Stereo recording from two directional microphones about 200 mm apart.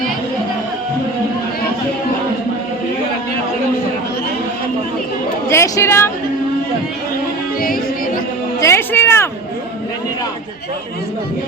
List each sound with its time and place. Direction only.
5.5 s speech: 15° left (ahead or behind)
7.6 s a capella: 45° left (ahead or behind)
8.6 s a sound: 10° left (ahead or behind)